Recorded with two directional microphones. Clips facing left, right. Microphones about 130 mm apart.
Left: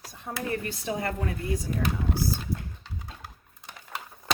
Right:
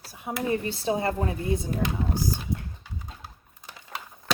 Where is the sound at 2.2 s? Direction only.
15° right (ahead or behind).